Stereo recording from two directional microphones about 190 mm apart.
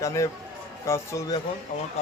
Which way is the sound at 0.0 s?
15° left (ahead or behind).